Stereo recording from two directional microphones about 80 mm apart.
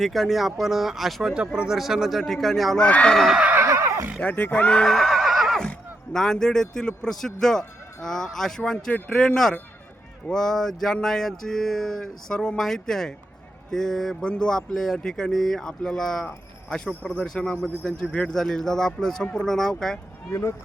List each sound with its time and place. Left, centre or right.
0.0 s a sound: centre
2.8 s speech: centre
3.2 s a sound: centre
3.4 s neigh: right
3.7 s neigh: right
4.2 s speech: centre
10.2 s a sound: centre
13.7 s speech: centre
20.3 s speech: left